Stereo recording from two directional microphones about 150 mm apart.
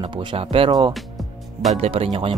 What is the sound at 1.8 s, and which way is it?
Speech, 40° right (ahead or behind).